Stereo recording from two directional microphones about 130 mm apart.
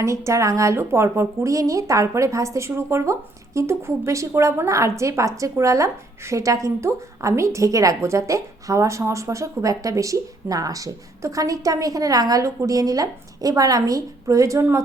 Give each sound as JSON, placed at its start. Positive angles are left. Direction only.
{"t": 0.0, "sound": "speech", "side_deg": -25}